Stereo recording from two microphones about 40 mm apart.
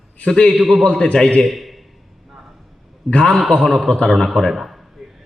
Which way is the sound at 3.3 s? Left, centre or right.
Centre.